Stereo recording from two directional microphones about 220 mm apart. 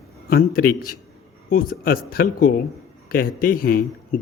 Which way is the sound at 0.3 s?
40° left (ahead or behind).